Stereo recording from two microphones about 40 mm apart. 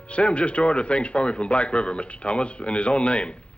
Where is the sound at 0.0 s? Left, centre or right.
Left.